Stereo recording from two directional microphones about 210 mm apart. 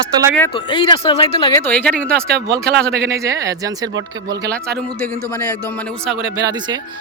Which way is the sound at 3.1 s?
15° right (ahead or behind).